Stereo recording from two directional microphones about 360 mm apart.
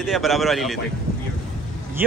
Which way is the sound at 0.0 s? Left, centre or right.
Centre.